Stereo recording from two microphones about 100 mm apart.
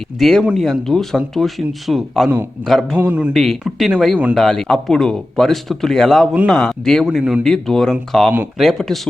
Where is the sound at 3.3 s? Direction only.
Centre (ahead or behind).